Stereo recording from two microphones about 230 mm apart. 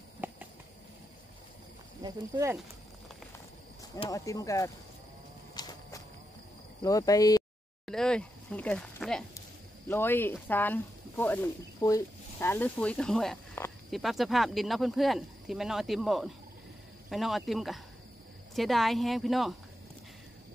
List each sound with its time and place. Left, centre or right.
2.0 s speech: centre
3.9 s speech: centre
5.5 s walk: centre
6.8 s speech: centre
7.8 s speech: centre